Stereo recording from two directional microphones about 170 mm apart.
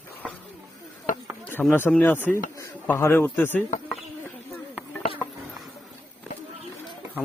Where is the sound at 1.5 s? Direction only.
10° left (ahead or behind).